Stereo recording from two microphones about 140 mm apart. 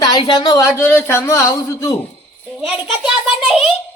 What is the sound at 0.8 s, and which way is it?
Speech, 15° left (ahead or behind).